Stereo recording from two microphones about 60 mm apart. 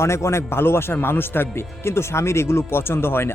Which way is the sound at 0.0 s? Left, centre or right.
Left.